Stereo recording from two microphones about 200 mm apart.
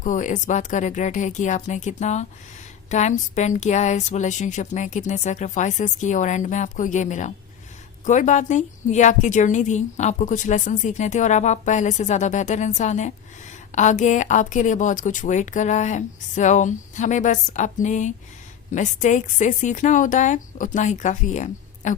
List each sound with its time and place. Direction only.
0.0 s a woman's voice: 40° left (ahead or behind)